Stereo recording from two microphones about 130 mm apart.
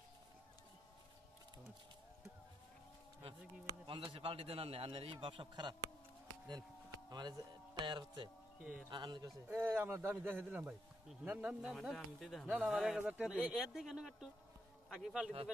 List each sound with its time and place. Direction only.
3.8 s a man's voice: 45° right (ahead or behind)
7.1 s a man's voice: 35° right (ahead or behind)
9.5 s a man's voice: 15° right (ahead or behind)